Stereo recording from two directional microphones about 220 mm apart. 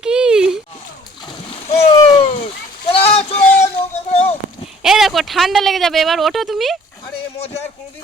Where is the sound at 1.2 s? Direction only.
20° left (ahead or behind).